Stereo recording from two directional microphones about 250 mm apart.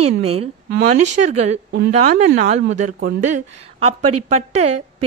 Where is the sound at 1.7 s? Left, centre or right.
Right.